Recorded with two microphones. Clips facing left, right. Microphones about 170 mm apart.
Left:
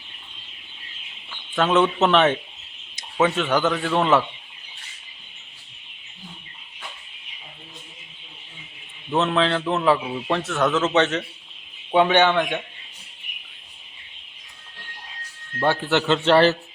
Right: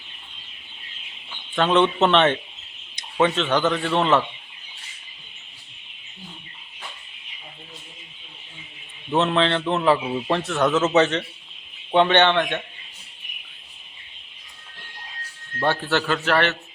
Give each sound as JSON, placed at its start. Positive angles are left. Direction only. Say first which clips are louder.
{"t": 1.5, "sound": "a man's voice", "louder": "even", "side_deg": 5}
{"t": 9.0, "sound": "a man's voice", "louder": "right 1 dB", "side_deg": 0}
{"t": 15.6, "sound": "a man's voice", "louder": "left 2 dB", "side_deg": 15}